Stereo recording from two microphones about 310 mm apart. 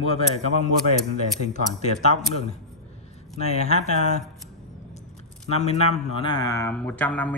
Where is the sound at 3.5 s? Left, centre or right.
Left.